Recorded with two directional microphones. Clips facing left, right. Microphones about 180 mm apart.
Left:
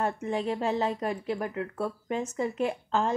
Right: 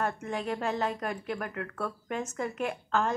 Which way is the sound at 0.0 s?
30° left (ahead or behind).